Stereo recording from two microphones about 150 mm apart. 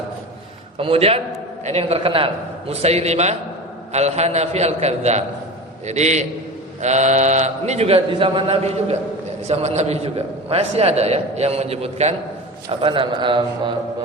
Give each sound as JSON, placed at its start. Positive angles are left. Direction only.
{"t": 0.8, "sound": "a man's voice", "side_deg": -40}
{"t": 12.6, "sound": "a man's voice", "side_deg": -35}